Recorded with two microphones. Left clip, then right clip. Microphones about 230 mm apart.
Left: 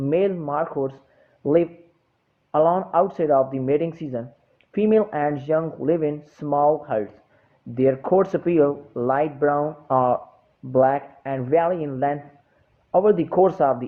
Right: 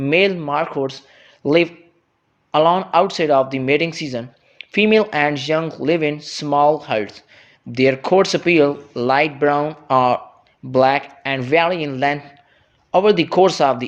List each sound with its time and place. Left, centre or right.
0.0 s speech: right
2.5 s speech: right